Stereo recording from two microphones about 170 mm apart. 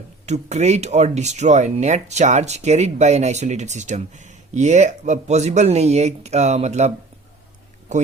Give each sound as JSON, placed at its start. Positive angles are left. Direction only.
{"t": 0.3, "sound": "speech", "side_deg": -40}